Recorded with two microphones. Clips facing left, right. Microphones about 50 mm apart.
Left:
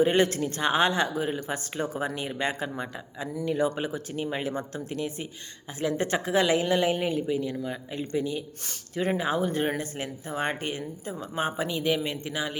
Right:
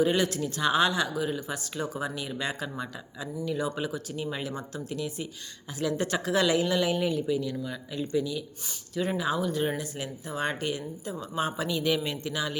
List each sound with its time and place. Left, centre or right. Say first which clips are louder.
0.0 s speech: left 3 dB; left